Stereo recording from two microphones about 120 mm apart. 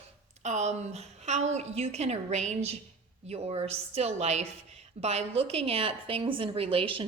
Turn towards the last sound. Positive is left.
turn(degrees=-45)  # may be behind; listen again after turning